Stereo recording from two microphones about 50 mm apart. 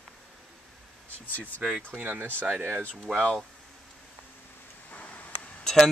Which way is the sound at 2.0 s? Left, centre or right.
Right.